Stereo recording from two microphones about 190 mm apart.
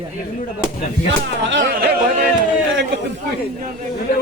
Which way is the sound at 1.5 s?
75° right (ahead or behind).